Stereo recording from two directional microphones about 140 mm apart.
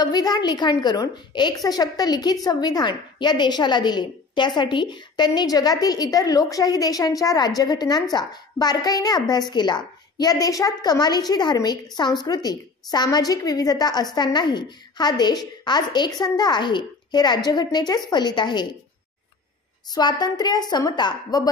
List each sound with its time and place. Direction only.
0.0 s a woman's voice: 30° left (ahead or behind)
19.9 s a woman's voice: 30° left (ahead or behind)